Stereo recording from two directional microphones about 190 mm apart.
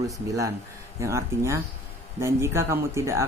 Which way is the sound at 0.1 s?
15° right (ahead or behind).